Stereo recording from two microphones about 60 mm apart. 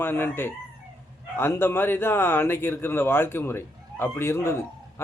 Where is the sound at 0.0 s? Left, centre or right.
Left.